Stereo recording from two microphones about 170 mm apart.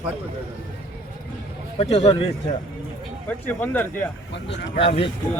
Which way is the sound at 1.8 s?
35° left (ahead or behind).